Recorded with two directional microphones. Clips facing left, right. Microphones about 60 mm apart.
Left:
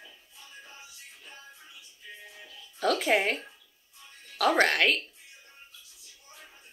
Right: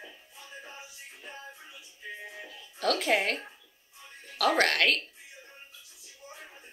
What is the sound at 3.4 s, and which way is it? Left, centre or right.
Music, right.